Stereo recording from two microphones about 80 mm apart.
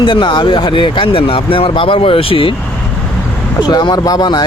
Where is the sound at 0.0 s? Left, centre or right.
Left.